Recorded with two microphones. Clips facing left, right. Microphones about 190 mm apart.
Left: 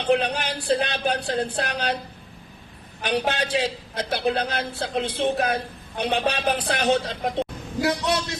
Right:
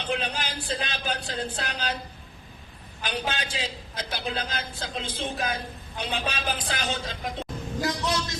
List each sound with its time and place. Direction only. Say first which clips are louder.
0.0 s a man's voice: left 8 dB; 65° left (ahead or behind)
3.0 s a man's voice: left 7 dB; 65° left (ahead or behind)